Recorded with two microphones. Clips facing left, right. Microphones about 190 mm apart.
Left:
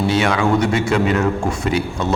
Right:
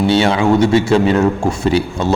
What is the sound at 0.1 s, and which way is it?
A man's voice, 30° right (ahead or behind).